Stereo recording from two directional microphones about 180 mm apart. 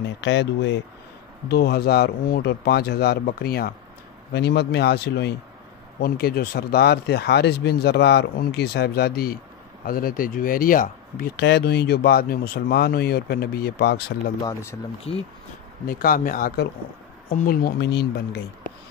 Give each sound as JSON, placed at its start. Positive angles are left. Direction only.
{"t": 0.2, "sound": "speech", "side_deg": 80}
{"t": 1.5, "sound": "speech", "side_deg": 60}
{"t": 14.4, "sound": "speech", "side_deg": 15}
{"t": 15.1, "sound": "speech", "side_deg": 35}
{"t": 15.9, "sound": "speech", "side_deg": 55}